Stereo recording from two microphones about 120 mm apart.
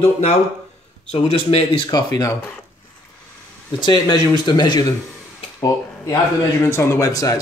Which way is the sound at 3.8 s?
35° left (ahead or behind).